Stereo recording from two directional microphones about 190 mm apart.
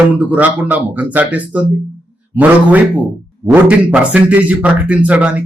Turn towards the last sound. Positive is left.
turn(degrees=-5)  # may be behind; listen again after turning